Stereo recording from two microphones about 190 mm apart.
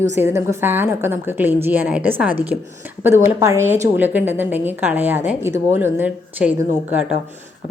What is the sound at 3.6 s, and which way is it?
Speech, 40° right (ahead or behind).